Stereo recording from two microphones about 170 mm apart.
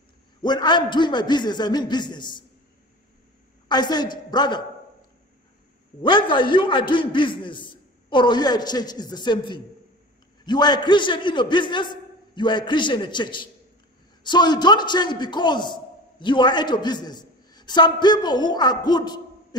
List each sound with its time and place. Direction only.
0.4 s a man's voice: 25° left (ahead or behind)
3.6 s a woman's voice: 25° left (ahead or behind)
6.0 s a man's voice: 30° left (ahead or behind)